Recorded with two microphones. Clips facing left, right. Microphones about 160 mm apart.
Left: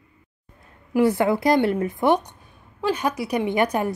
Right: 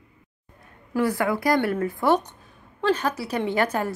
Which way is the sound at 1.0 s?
20° left (ahead or behind).